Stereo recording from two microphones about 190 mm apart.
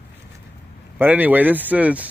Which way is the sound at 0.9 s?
10° right (ahead or behind).